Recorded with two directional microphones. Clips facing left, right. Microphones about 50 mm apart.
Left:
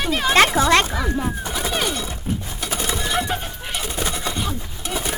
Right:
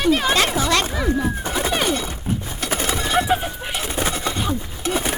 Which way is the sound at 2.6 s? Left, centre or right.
Right.